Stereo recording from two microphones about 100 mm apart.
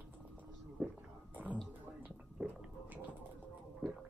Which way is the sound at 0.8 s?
15° right (ahead or behind).